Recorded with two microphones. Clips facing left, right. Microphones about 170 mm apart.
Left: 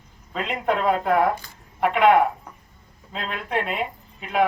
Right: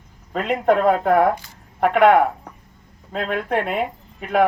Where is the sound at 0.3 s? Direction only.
50° right (ahead or behind).